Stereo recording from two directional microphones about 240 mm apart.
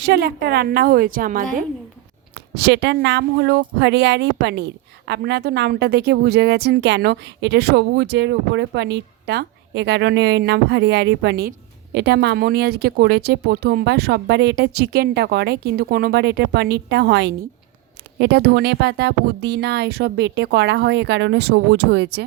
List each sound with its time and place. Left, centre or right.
0.0 s a woman's voice: right